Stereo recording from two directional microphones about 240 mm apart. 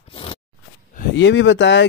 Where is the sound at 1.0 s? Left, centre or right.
Left.